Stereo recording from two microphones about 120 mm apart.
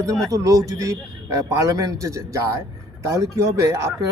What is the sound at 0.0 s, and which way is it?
A man's voice, 30° right (ahead or behind).